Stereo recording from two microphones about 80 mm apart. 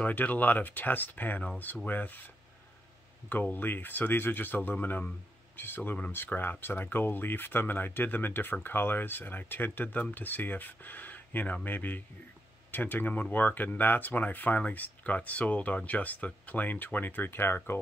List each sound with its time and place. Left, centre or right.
0.0 s speech: left